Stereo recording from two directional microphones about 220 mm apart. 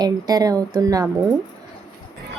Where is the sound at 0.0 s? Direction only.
15° right (ahead or behind).